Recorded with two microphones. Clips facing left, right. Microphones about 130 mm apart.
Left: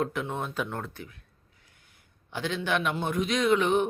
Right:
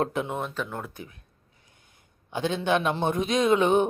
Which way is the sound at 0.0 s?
25° right (ahead or behind).